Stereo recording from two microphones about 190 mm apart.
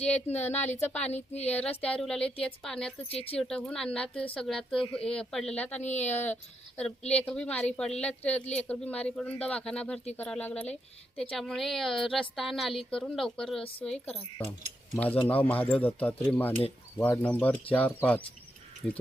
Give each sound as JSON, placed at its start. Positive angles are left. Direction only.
{"t": 0.0, "sound": "a woman's voice", "side_deg": 5}
{"t": 3.1, "sound": "speech", "side_deg": 30}
{"t": 3.3, "sound": "a woman's voice", "side_deg": 5}
{"t": 5.8, "sound": "speech", "side_deg": 35}
{"t": 6.1, "sound": "a woman's voice", "side_deg": 10}